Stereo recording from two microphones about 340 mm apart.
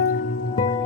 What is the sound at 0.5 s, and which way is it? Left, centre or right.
Music, centre.